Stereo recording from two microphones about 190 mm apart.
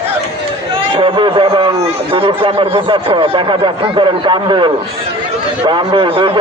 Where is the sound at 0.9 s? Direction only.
30° right (ahead or behind).